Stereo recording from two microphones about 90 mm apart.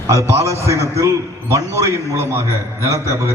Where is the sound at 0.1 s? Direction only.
35° right (ahead or behind).